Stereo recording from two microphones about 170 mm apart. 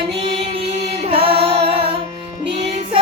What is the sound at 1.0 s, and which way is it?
Music, 35° right (ahead or behind).